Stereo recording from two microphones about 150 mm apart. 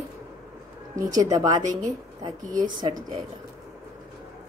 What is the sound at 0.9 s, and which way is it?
Speech, 25° right (ahead or behind).